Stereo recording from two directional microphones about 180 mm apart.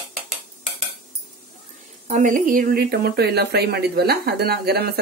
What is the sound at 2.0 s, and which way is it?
A woman's voice, 45° right (ahead or behind).